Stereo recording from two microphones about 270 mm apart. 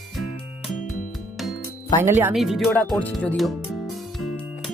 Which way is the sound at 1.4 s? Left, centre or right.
Centre.